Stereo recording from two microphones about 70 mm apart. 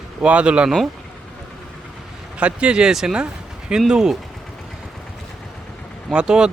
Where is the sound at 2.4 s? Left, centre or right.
Centre.